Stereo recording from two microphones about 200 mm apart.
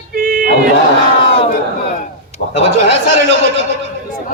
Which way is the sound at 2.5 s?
65° right (ahead or behind).